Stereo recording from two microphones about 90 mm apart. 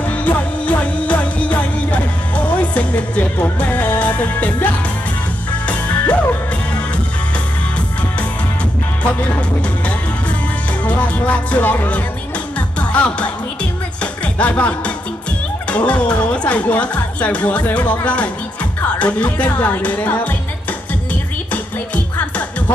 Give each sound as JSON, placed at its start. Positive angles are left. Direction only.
{"t": 0.0, "sound": "music", "side_deg": 15}
{"t": 10.8, "sound": "music", "side_deg": 15}
{"t": 15.7, "sound": "speech", "side_deg": 15}